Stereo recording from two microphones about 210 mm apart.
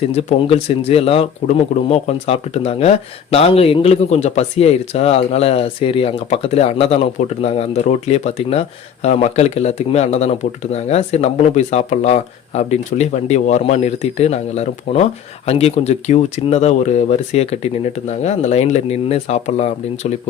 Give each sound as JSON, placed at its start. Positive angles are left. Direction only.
{"t": 0.1, "sound": "speech", "side_deg": 30}